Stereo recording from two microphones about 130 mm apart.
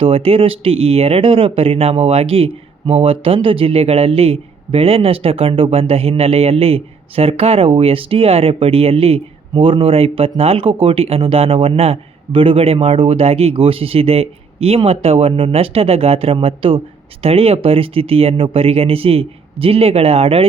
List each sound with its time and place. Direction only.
0.0 s speech: 45° right (ahead or behind)